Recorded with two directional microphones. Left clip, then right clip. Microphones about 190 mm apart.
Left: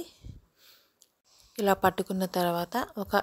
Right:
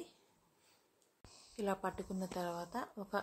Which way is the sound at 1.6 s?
45° left (ahead or behind).